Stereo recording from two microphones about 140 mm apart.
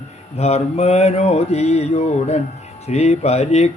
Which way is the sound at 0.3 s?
50° left (ahead or behind).